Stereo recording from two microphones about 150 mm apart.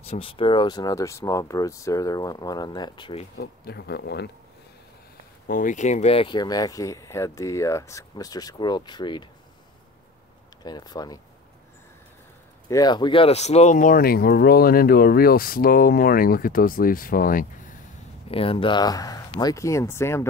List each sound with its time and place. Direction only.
0.0 s speech: 40° left (ahead or behind)
3.3 s speech: 90° left
5.5 s speech: 60° left (ahead or behind); by 9.3 s 30° left (ahead or behind)
10.6 s speech: 25° left (ahead or behind)
12.6 s speech: 25° left (ahead or behind); by 17.7 s 65° left (ahead or behind)
18.3 s speech: 40° left (ahead or behind); by 20.2 s 15° left (ahead or behind)